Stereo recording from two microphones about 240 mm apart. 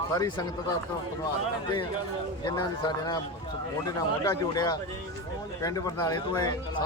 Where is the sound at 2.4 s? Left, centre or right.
Centre.